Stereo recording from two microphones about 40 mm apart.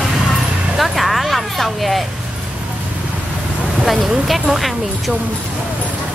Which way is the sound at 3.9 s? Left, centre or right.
Centre.